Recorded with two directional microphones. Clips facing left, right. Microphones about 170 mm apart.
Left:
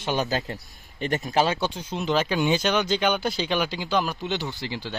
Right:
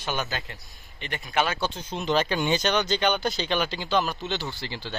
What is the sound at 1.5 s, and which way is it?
Speech, 15° left (ahead or behind).